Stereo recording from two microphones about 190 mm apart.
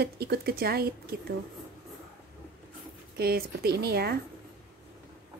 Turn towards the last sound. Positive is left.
turn(degrees=-55)  # may be behind; listen again after turning